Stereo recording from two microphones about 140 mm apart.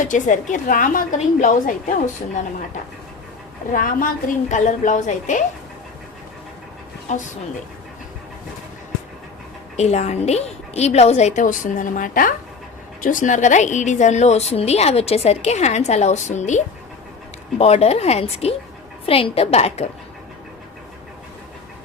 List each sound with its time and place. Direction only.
0.0 s a woman's voice: 65° left (ahead or behind)
3.7 s a woman's voice: 70° left (ahead or behind)
7.1 s a woman's voice: 60° left (ahead or behind)
9.7 s a woman's voice: 50° left (ahead or behind); by 12.3 s 75° left (ahead or behind)
13.0 s a woman's voice: 65° left (ahead or behind); by 19.9 s 50° left (ahead or behind)